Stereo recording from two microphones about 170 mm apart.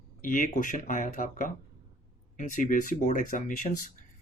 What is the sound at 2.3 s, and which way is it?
Speech, 50° left (ahead or behind).